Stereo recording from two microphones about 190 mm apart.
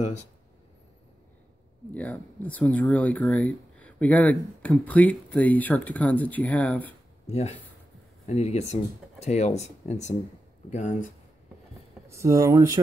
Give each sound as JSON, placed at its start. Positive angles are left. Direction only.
{"t": 2.0, "sound": "speech", "side_deg": 5}
{"t": 7.2, "sound": "speech", "side_deg": 35}
{"t": 12.1, "sound": "speech", "side_deg": -15}